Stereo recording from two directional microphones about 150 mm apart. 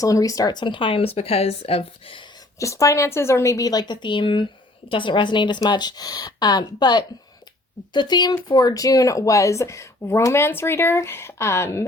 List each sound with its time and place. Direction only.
0.0 s speech: 25° left (ahead or behind); by 2.2 s 40° left (ahead or behind)
2.6 s speech: 20° left (ahead or behind)